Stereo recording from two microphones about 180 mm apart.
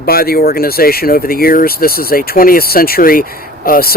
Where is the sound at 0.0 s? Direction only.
55° left (ahead or behind).